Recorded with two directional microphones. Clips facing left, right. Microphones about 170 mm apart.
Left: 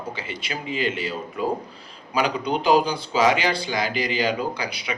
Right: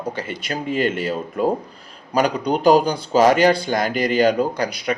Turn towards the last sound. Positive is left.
turn(degrees=-45)  # may be behind; listen again after turning